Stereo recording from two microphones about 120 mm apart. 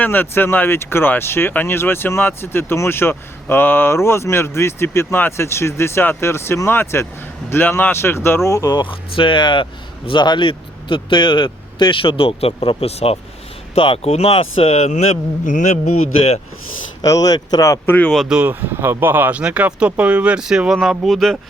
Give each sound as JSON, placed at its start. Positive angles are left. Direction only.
{"t": 0.0, "sound": "speech", "side_deg": 15}
{"t": 8.9, "sound": "a man's voice", "side_deg": 45}
{"t": 17.0, "sound": "speech", "side_deg": 30}
{"t": 17.9, "sound": "speech", "side_deg": 10}
{"t": 18.2, "sound": "speech", "side_deg": -10}